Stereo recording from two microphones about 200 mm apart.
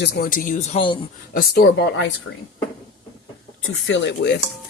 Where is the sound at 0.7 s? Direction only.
25° left (ahead or behind).